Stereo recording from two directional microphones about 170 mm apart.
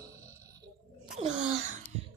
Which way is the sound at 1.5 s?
45° right (ahead or behind).